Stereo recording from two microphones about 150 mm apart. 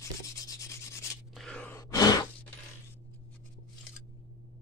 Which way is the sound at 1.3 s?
5° left (ahead or behind).